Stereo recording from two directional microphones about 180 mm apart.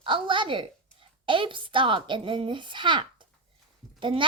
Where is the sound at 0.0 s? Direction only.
30° right (ahead or behind).